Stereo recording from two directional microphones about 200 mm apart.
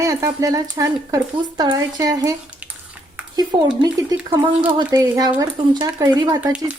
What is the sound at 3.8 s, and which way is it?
Speech, 25° right (ahead or behind).